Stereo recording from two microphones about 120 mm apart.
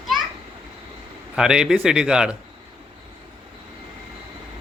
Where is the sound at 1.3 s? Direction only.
5° right (ahead or behind).